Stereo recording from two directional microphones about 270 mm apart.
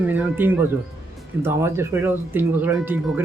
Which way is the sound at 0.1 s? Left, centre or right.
Centre.